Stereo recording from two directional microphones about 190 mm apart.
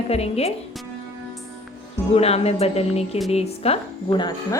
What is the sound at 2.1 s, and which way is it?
A woman's voice, 30° left (ahead or behind).